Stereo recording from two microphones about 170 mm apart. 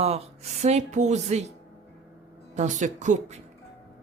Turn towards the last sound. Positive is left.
turn(degrees=-45)  # may be behind; listen again after turning